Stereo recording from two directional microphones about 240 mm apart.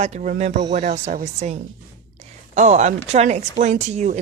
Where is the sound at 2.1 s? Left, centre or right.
Right.